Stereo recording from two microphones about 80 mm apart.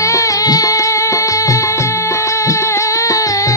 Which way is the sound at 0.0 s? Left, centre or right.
Left.